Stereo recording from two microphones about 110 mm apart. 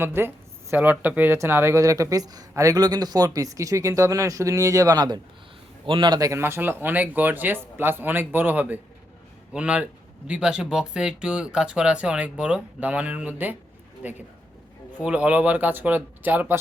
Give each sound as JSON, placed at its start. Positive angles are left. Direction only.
{"t": 0.0, "sound": "speech", "side_deg": -20}
{"t": 5.8, "sound": "a man's voice", "side_deg": -50}
{"t": 6.1, "sound": "speech", "side_deg": -30}